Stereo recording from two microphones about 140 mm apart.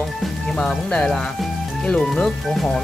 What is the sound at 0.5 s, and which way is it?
Speech, 5° left (ahead or behind).